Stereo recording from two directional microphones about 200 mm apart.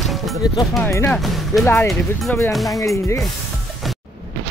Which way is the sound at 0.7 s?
10° left (ahead or behind).